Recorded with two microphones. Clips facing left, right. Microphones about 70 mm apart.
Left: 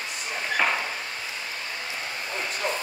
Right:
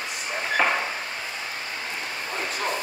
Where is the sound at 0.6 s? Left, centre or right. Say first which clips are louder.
Right 2 dB; centre.